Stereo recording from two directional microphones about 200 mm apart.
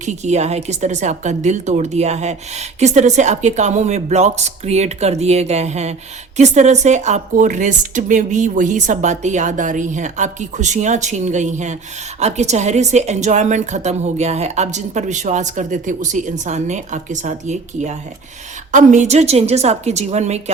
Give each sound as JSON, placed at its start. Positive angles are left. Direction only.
{"t": 0.0, "sound": "a woman's voice", "side_deg": -35}